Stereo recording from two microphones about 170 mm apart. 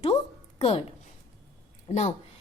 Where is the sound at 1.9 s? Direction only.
45° left (ahead or behind).